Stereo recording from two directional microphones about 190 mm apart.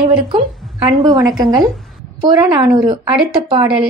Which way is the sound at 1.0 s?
20° right (ahead or behind).